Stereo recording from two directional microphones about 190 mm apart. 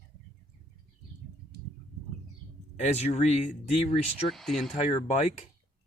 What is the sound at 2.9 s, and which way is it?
Speech, 35° left (ahead or behind).